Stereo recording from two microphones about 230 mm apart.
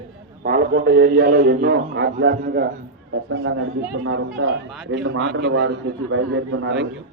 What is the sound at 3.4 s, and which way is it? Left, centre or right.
A man's voice, right.